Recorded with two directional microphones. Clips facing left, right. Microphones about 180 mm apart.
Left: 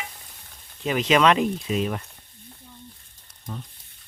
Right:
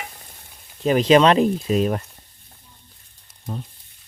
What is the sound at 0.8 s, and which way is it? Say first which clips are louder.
Speech: right 5 dB; 40° right (ahead or behind).